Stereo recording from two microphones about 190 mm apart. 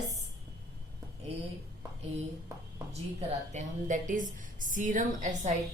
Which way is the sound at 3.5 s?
40° right (ahead or behind).